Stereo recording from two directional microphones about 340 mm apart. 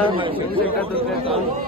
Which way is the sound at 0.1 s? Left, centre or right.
Centre.